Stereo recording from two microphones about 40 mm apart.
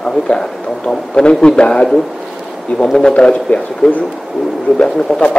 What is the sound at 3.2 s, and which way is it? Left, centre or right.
Speech, left.